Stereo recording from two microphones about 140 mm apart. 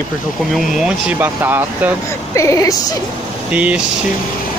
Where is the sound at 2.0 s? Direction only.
20° left (ahead or behind).